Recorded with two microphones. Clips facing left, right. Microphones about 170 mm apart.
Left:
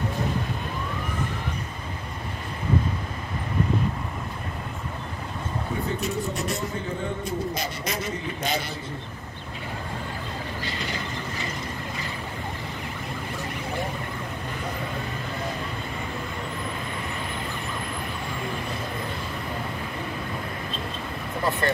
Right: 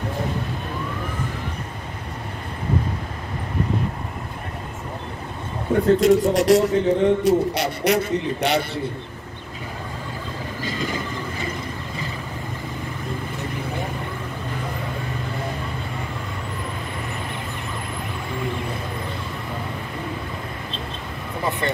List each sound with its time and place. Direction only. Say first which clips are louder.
5.9 s a man's voice: right 17 dB; 90° right; by 8.6 s 65° right (ahead or behind)